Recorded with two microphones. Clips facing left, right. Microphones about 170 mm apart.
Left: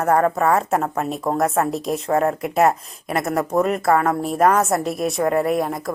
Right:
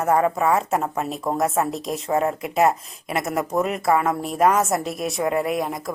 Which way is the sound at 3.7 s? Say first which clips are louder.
Left 2 dB; 50° left (ahead or behind).